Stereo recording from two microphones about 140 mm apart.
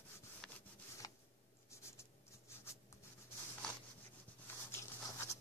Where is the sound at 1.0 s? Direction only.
25° left (ahead or behind).